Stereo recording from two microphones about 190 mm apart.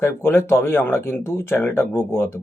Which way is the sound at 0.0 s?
15° left (ahead or behind).